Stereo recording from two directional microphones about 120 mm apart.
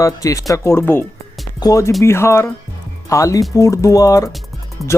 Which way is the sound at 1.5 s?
30° left (ahead or behind).